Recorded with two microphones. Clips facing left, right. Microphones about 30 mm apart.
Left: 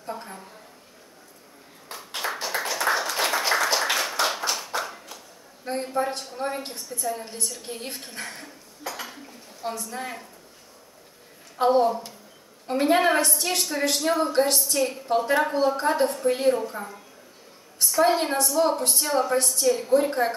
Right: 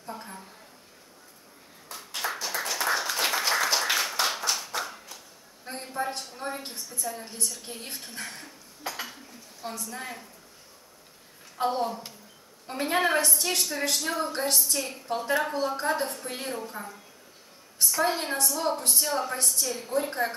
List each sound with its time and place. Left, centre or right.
0.0 s a sound: centre
2.0 s ping: centre
2.4 s a sound: centre
5.7 s a woman's voice: centre
8.8 s dishes: centre
9.1 s dishes: centre
11.5 s a woman's voice: centre
17.8 s a sound: centre
18.1 s a woman's voice: centre